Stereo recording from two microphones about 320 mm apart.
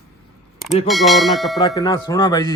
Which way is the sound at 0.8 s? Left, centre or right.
Centre.